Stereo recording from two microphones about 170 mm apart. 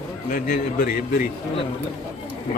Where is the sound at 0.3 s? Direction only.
55° left (ahead or behind).